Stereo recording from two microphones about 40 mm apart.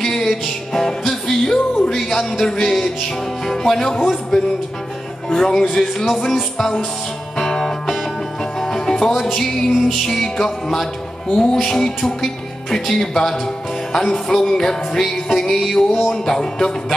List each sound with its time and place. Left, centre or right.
0.0 s music: centre
7.3 s music: centre